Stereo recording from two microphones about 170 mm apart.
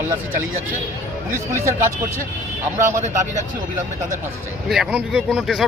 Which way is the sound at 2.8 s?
15° right (ahead or behind).